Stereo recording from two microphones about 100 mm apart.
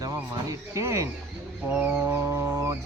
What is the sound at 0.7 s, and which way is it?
Speech, 30° right (ahead or behind).